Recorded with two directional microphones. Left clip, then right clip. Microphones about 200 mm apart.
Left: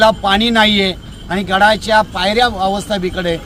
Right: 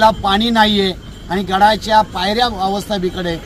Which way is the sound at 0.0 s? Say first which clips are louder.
Left 1 dB; 15° left (ahead or behind).